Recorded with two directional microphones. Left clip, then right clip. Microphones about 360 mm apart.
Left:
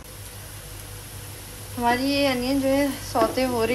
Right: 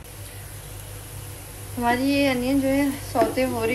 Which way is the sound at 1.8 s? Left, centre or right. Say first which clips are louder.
Even; centre.